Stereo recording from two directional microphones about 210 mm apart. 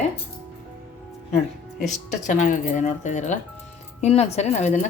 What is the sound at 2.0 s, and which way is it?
Speech, 35° left (ahead or behind).